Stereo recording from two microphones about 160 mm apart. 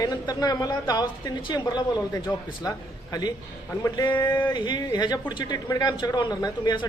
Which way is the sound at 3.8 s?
20° left (ahead or behind).